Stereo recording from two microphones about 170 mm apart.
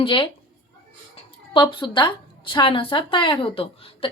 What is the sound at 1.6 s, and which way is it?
Speech, 30° left (ahead or behind).